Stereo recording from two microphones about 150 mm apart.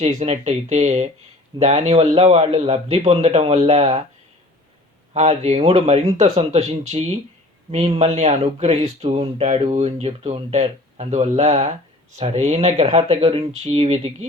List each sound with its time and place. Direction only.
0.2 s a man's voice: 45° right (ahead or behind)
5.1 s a man's voice: 50° right (ahead or behind)